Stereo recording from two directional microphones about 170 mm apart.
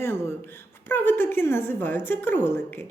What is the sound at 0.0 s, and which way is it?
A woman's voice, 15° left (ahead or behind).